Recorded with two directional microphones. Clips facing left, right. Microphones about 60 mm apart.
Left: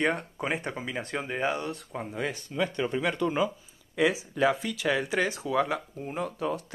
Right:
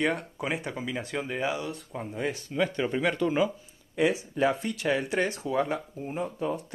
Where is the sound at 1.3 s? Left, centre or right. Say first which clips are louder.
Left 2 dB; left.